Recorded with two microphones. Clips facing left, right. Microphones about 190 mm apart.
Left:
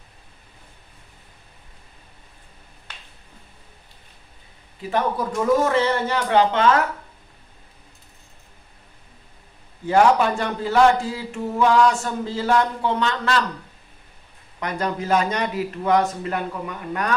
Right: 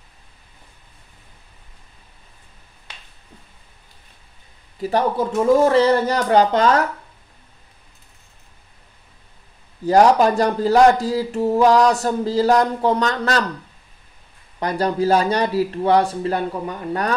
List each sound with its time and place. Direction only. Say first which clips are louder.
4.9 s speech: right 4 dB; 25° right (ahead or behind)
9.8 s speech: right 3 dB; 40° right (ahead or behind)
14.6 s speech: right 6 dB; 35° right (ahead or behind)